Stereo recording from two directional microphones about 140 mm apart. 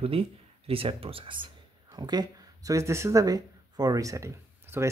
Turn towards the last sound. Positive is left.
turn(degrees=-20)  # may be behind; listen again after turning